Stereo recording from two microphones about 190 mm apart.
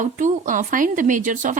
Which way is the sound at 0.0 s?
40° right (ahead or behind).